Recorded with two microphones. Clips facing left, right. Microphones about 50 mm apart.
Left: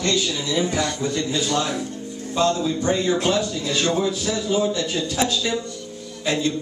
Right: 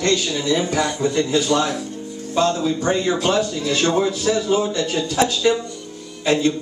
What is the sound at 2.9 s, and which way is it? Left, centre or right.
Speech, right.